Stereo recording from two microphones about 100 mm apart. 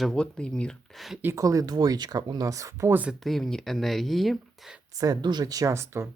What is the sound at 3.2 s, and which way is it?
Speech, centre (ahead or behind).